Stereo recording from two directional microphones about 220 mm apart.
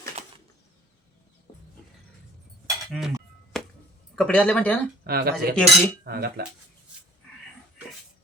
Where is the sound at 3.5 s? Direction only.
Centre (ahead or behind).